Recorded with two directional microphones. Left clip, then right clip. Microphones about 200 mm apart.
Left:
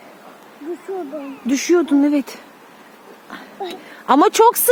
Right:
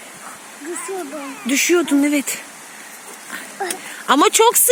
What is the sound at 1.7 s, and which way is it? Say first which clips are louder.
Speech: left 3 dB; 5° left (ahead or behind).